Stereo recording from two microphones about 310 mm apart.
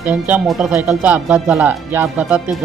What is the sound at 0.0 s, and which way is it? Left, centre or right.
Speech, centre.